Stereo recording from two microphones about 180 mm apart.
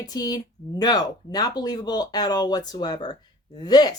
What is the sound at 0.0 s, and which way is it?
Speech, 20° left (ahead or behind).